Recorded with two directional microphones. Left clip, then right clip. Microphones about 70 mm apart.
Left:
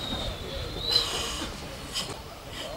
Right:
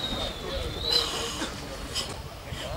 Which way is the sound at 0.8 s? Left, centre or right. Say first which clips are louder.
Even; centre.